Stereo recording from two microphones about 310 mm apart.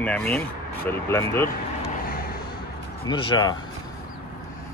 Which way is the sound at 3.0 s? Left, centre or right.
Centre.